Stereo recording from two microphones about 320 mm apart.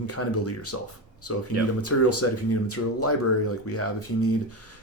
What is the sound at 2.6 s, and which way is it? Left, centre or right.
Speech, left.